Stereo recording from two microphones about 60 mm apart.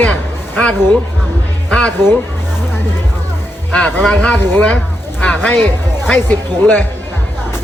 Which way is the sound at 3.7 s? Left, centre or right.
Centre.